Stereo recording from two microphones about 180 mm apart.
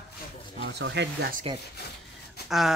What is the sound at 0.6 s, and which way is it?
Speech, 65° right (ahead or behind).